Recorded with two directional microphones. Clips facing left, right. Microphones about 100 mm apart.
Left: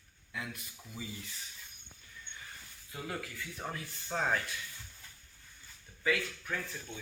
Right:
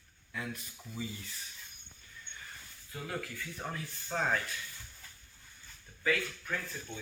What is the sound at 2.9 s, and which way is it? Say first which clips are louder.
Speech: right 1 dB; 15° left (ahead or behind).